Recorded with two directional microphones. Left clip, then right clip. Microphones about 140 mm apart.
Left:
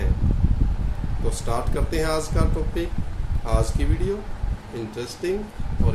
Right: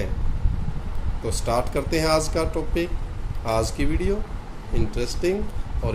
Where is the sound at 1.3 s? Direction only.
45° right (ahead or behind).